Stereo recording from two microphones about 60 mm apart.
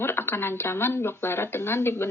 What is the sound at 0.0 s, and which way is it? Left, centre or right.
Speech, left.